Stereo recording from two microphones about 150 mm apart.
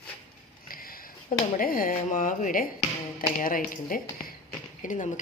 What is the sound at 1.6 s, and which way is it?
Speech, 70° left (ahead or behind).